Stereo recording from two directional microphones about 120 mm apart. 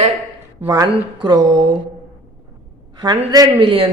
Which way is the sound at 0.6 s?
25° right (ahead or behind).